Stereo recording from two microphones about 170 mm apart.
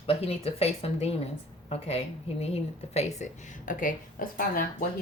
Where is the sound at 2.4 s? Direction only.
40° left (ahead or behind).